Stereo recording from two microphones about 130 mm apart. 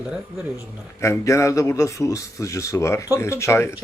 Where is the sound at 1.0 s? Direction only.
20° left (ahead or behind).